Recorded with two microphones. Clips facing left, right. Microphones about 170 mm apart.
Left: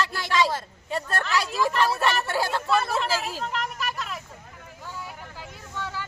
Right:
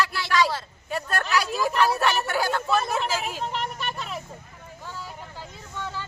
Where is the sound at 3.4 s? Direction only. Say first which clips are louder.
Even; centre (ahead or behind).